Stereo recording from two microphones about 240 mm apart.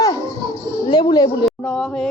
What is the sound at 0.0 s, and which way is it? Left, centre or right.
Children playing, centre.